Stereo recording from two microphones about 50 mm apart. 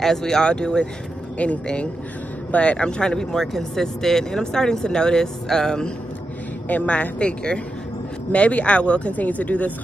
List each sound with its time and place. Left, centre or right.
0.0 s speech: centre
1.4 s speech: left; by 5.9 s centre
6.7 s speech: left